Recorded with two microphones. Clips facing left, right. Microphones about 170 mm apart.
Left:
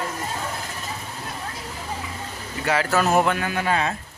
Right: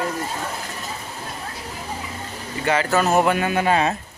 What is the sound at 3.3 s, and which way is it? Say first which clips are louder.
Speech: right 4 dB; 20° right (ahead or behind).